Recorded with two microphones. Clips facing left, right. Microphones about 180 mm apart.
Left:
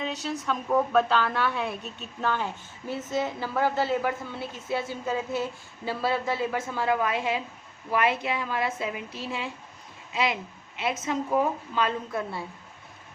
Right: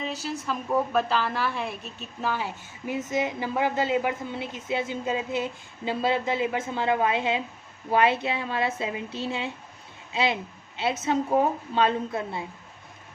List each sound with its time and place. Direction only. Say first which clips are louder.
0.0 s a woman's voice: left 1 dB; centre (ahead or behind); by 12.5 s 20° right (ahead or behind)